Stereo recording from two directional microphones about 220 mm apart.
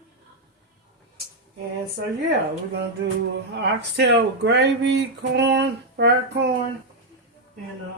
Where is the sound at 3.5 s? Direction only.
50° right (ahead or behind).